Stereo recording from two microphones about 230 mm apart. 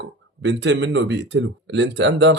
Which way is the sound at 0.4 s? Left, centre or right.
Right.